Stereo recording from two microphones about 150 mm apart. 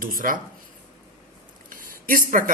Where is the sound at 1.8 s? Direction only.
70° right (ahead or behind).